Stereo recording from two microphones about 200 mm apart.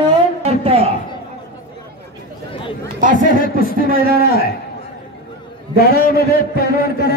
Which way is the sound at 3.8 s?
45° right (ahead or behind).